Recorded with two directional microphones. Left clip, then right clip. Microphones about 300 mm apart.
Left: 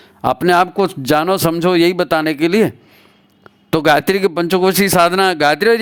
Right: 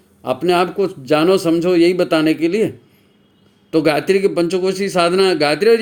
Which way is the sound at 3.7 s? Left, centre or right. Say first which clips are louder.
Left 2 dB; left.